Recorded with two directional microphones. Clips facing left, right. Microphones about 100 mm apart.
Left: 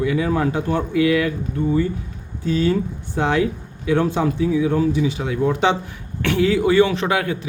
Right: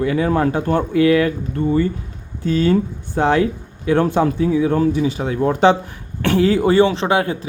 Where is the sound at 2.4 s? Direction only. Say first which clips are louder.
Right 3 dB; 50° right (ahead or behind); by 7.4 s 30° right (ahead or behind).